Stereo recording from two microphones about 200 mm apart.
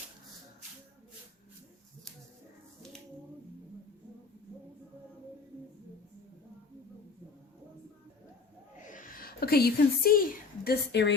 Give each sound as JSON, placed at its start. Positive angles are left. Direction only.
{"t": 8.9, "sound": "a woman's voice", "side_deg": 40}